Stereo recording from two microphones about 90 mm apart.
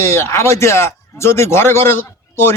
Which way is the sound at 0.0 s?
30° left (ahead or behind).